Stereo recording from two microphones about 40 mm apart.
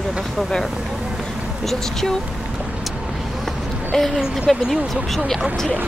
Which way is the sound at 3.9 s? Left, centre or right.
Centre.